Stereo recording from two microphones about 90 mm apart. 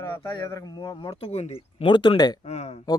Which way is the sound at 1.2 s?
90° left.